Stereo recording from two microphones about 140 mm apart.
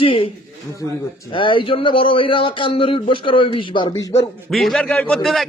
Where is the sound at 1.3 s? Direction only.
35° left (ahead or behind).